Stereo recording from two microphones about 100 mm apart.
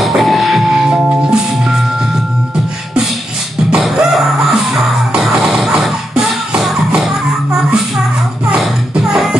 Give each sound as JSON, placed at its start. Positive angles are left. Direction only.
{"t": 0.0, "sound": "music", "side_deg": 0}
{"t": 3.7, "sound": "music", "side_deg": 0}
{"t": 8.5, "sound": "music", "side_deg": 0}